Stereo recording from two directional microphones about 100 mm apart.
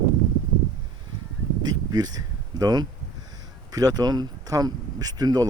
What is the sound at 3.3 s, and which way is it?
Speech, 40° right (ahead or behind).